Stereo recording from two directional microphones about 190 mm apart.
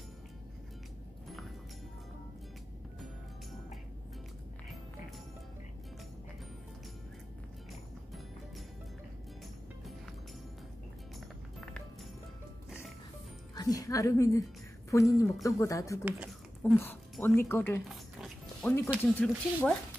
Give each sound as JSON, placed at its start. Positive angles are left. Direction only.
{"t": 11.1, "sound": "music", "side_deg": 0}
{"t": 13.6, "sound": "a woman's voice", "side_deg": 20}
{"t": 16.1, "sound": "a sound", "side_deg": -5}
{"t": 16.7, "sound": "speech", "side_deg": 10}
{"t": 17.8, "sound": "music", "side_deg": 0}
{"t": 19.0, "sound": "speech", "side_deg": 5}